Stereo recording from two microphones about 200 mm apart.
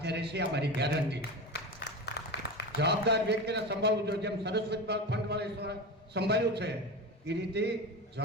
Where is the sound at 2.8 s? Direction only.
55° right (ahead or behind).